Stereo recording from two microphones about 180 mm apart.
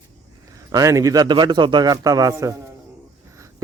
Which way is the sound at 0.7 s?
20° right (ahead or behind).